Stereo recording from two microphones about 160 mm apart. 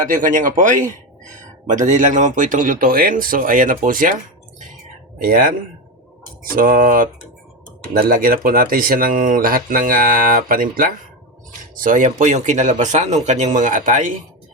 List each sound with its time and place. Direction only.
0.1 s speech: 55° right (ahead or behind)
5.2 s speech: 60° right (ahead or behind)